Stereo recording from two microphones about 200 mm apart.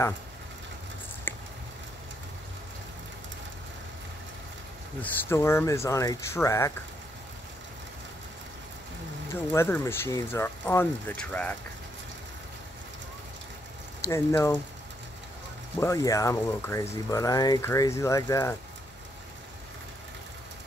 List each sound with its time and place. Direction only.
1.3 s a sound: 10° left (ahead or behind)
5.0 s speech: 15° left (ahead or behind)
9.3 s speech: 10° left (ahead or behind)
14.0 s speech: 15° left (ahead or behind)
15.8 s speech: 15° left (ahead or behind)